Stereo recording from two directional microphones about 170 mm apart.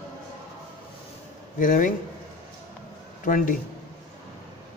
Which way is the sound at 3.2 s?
50° left (ahead or behind).